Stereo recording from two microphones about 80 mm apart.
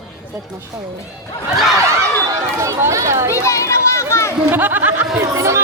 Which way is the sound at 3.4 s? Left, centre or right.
Left.